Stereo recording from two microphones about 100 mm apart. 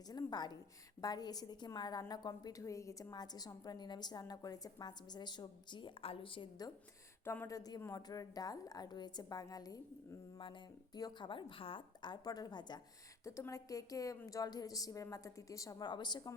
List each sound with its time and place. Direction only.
0.1 s a woman's voice: 40° left (ahead or behind); by 6.5 s 60° left (ahead or behind)
7.4 s a woman's voice: 40° left (ahead or behind)
10.3 s a woman's voice: 50° left (ahead or behind)
13.2 s a woman's voice: 30° left (ahead or behind)
15.9 s a woman's voice: 45° left (ahead or behind)